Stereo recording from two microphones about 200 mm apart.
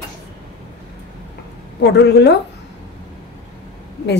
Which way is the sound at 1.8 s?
55° left (ahead or behind).